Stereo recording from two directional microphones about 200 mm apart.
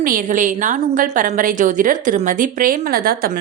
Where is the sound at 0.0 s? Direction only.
40° right (ahead or behind).